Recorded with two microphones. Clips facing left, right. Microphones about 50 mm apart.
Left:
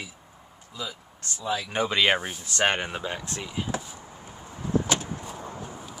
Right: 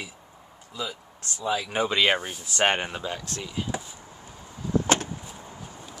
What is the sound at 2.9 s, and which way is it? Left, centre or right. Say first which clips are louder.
Speech: even; centre.